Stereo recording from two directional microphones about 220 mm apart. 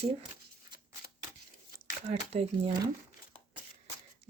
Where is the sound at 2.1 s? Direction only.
25° right (ahead or behind).